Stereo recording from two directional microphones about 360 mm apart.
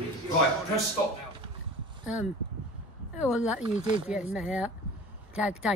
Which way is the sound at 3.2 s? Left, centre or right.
Centre.